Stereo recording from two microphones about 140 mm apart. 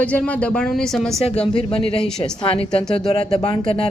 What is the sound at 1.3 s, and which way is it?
Speech, 45° left (ahead or behind).